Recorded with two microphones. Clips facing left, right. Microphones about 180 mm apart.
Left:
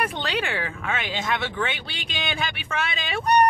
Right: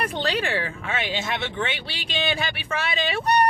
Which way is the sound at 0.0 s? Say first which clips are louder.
Right 1 dB; 35° right (ahead or behind).